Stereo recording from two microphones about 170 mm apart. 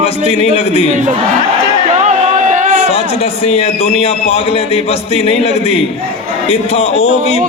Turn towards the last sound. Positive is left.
turn(degrees=40)  # may be behind; listen again after turning